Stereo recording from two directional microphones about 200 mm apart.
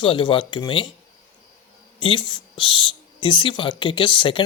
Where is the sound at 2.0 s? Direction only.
25° left (ahead or behind).